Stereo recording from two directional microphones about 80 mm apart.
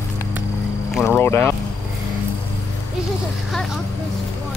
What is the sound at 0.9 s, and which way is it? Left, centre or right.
Speech, centre.